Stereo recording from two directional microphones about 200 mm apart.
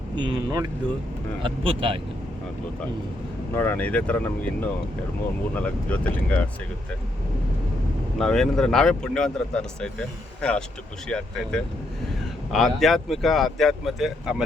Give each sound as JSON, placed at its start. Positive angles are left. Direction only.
{"t": 0.2, "sound": "speech", "side_deg": -20}
{"t": 3.5, "sound": "speech", "side_deg": 10}
{"t": 8.2, "sound": "speech", "side_deg": 0}
{"t": 11.1, "sound": "speech", "side_deg": 5}